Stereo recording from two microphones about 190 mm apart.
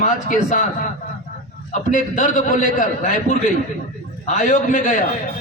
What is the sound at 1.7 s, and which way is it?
A man's voice, 40° left (ahead or behind).